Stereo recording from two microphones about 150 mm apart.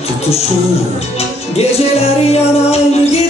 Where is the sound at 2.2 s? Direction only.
45° left (ahead or behind).